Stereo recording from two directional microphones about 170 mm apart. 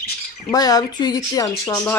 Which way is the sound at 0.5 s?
20° left (ahead or behind).